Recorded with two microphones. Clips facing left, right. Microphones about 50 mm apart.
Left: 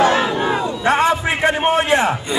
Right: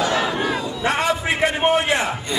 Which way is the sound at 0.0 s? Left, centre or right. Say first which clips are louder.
Left 5 dB; left.